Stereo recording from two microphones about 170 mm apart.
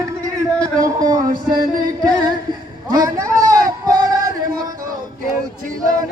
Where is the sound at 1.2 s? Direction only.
50° right (ahead or behind).